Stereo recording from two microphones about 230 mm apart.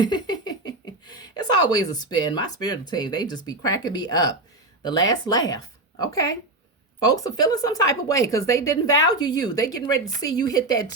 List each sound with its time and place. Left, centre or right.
0.0 s a woman's voice: centre